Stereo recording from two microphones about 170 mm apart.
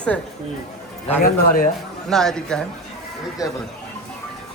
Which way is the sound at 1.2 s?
55° left (ahead or behind).